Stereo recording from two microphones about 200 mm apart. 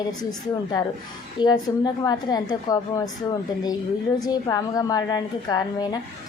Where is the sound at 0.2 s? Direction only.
20° left (ahead or behind).